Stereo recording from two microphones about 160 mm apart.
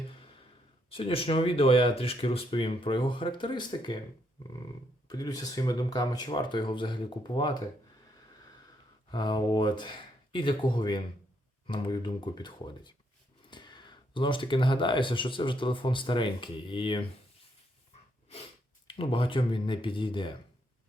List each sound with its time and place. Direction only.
0.1 s sigh: 35° left (ahead or behind)
0.9 s speech: 35° left (ahead or behind)
5.0 s speech: 25° left (ahead or behind)
9.0 s speech: 25° left (ahead or behind)
18.9 s speech: 35° left (ahead or behind)